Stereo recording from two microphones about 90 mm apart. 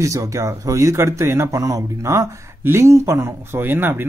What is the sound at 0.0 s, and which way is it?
A man's voice, 35° right (ahead or behind).